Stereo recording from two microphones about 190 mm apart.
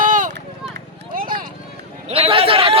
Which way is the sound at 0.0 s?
45° right (ahead or behind).